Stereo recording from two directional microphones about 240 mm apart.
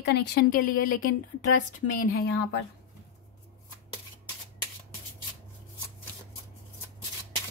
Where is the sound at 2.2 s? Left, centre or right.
Left.